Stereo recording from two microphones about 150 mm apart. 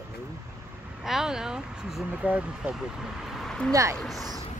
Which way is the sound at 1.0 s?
5° right (ahead or behind).